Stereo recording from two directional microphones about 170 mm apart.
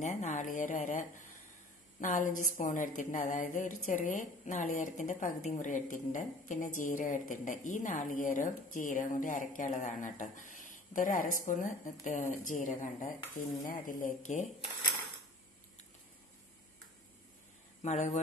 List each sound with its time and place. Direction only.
0.0 s a woman's voice: 45° left (ahead or behind)
17.8 s a woman's voice: 40° left (ahead or behind)